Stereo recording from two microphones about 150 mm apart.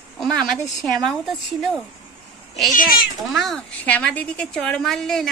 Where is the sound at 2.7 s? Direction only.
65° left (ahead or behind).